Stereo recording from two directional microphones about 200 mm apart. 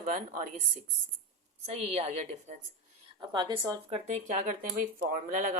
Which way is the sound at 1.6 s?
30° right (ahead or behind).